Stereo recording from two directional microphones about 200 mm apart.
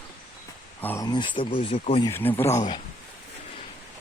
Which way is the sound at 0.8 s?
10° left (ahead or behind).